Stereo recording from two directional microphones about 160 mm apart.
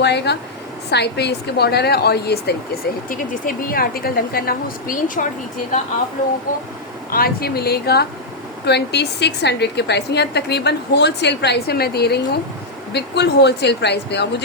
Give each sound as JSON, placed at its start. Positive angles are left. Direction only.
{"t": 0.0, "sound": "a woman's voice", "side_deg": 90}
{"t": 7.1, "sound": "a woman's voice", "side_deg": 70}